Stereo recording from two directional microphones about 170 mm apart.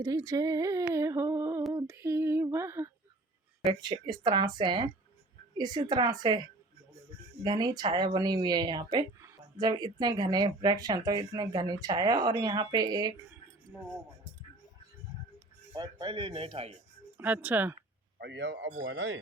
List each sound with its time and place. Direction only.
0.0 s speech: 20° right (ahead or behind)
1.7 s female singing: 15° right (ahead or behind)
3.7 s speech: 25° right (ahead or behind)
7.4 s speech: 25° right (ahead or behind)
15.7 s speech: 25° right (ahead or behind)
17.2 s speech: 10° right (ahead or behind)
18.2 s speech: 90° right